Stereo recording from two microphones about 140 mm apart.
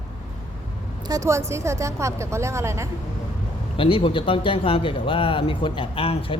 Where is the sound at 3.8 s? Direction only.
40° left (ahead or behind).